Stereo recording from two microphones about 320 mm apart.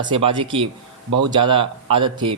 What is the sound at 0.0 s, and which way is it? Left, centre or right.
Speech, centre.